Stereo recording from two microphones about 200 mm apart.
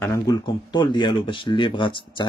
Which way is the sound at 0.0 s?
15° left (ahead or behind).